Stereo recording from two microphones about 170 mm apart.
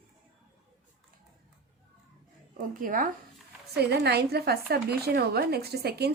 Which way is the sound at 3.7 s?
70° right (ahead or behind).